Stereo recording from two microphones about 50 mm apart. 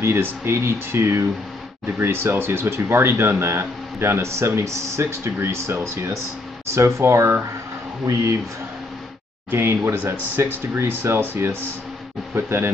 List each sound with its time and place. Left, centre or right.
0.0 s speech: right
9.5 s speech: right